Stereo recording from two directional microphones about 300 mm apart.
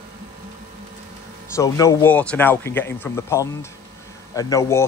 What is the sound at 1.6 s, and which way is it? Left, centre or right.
Speech, centre.